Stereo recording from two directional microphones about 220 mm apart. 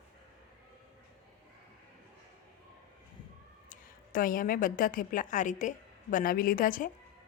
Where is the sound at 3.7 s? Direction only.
40° left (ahead or behind).